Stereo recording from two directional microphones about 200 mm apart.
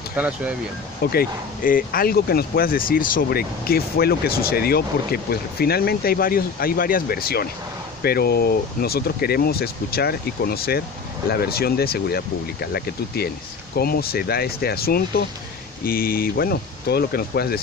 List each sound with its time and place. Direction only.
0.1 s speech: 5° right (ahead or behind)
1.1 s speech: 45° left (ahead or behind)